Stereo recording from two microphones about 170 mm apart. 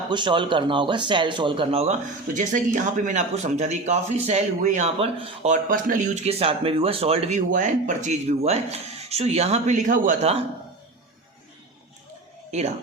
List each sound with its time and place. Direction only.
0.1 s speech: 30° right (ahead or behind)
2.2 s speech: 50° right (ahead or behind)
12.5 s speech: 40° right (ahead or behind)